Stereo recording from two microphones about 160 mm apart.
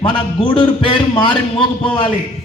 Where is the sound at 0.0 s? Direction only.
30° left (ahead or behind).